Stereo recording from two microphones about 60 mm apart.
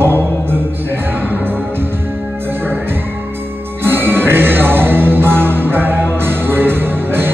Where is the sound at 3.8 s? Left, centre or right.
Right.